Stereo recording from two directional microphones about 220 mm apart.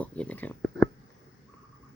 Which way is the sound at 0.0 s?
5° left (ahead or behind).